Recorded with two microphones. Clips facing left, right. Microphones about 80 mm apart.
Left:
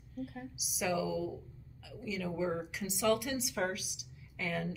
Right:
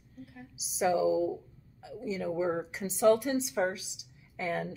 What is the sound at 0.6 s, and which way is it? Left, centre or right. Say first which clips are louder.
A woman's voice: right 7 dB; right.